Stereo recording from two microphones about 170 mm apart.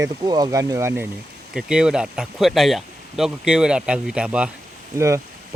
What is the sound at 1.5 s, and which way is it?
Speech, 5° right (ahead or behind).